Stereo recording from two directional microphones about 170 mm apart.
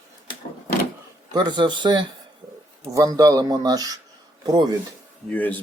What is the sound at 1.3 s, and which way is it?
Speech, 25° right (ahead or behind).